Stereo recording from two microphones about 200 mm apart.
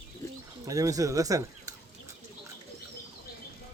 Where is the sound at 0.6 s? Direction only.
15° right (ahead or behind).